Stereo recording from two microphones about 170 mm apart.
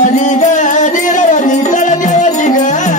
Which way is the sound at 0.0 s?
45° left (ahead or behind).